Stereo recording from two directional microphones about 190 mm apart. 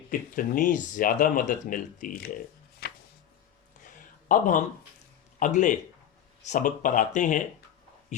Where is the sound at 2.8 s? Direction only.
55° left (ahead or behind).